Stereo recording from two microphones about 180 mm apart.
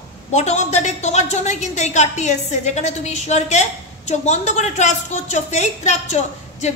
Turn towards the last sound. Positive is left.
turn(degrees=40)  # may be behind; listen again after turning